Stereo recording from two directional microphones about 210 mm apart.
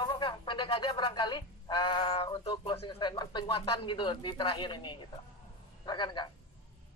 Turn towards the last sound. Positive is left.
turn(degrees=20)  # may be behind; listen again after turning